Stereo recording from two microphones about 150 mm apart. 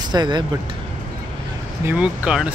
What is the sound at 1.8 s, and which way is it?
Speech, 10° right (ahead or behind).